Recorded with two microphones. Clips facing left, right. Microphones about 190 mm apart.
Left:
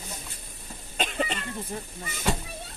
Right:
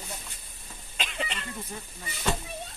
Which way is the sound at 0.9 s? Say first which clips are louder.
Left 6 dB; 45° left (ahead or behind).